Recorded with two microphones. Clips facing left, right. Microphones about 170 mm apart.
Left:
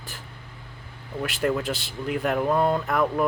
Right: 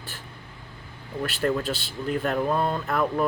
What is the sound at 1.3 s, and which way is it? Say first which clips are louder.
Speech: even; 15° left (ahead or behind).